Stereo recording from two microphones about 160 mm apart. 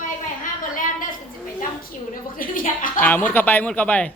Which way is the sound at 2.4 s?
60° left (ahead or behind).